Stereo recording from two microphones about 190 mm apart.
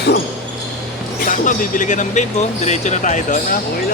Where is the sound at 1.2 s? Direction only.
45° left (ahead or behind).